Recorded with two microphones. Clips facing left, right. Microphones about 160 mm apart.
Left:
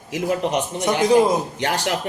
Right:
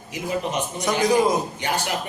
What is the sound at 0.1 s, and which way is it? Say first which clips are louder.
Speech: left 5 dB; 75° left (ahead or behind).